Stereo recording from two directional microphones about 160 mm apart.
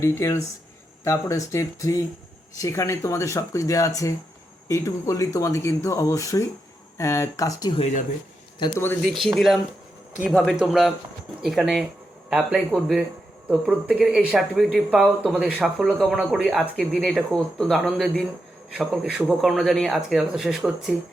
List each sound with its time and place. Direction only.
0.0 s speech: 20° left (ahead or behind)
7.8 s speech: 45° left (ahead or behind)
9.0 s speech: centre (ahead or behind)